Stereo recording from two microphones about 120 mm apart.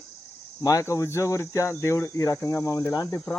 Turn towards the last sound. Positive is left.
turn(degrees=25)  # may be behind; listen again after turning